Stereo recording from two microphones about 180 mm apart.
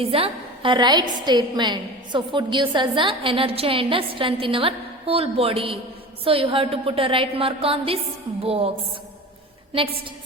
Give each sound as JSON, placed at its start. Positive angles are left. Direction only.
{"t": 0.0, "sound": "a woman's voice", "side_deg": -30}
{"t": 9.7, "sound": "a woman's voice", "side_deg": -30}